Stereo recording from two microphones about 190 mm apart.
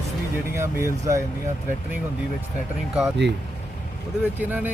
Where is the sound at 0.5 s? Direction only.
15° right (ahead or behind).